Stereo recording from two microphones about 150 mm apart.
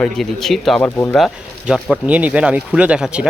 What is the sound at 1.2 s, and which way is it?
Speech, 5° right (ahead or behind).